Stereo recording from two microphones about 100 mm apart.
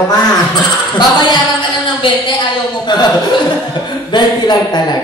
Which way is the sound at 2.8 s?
45° left (ahead or behind).